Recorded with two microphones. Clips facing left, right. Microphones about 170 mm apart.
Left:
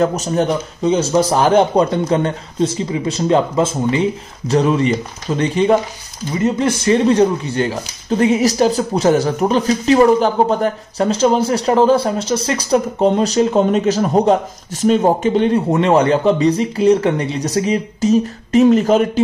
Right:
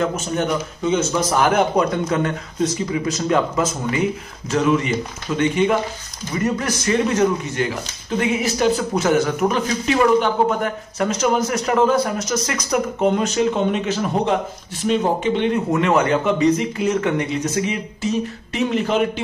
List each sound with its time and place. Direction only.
0.0 s speech: 40° left (ahead or behind)